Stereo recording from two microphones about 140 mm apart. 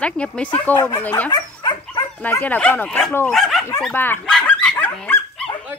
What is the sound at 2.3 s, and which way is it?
Speech, 10° left (ahead or behind).